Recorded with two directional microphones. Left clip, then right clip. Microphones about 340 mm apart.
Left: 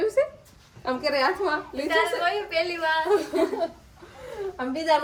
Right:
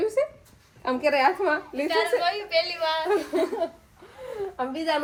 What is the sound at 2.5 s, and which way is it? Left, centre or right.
Speech, centre.